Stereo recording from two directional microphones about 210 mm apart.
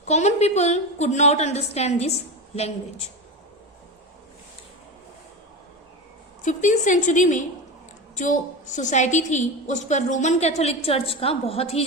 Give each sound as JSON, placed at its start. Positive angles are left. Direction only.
{"t": 0.0, "sound": "a woman's voice", "side_deg": 35}
{"t": 6.4, "sound": "a woman's voice", "side_deg": 35}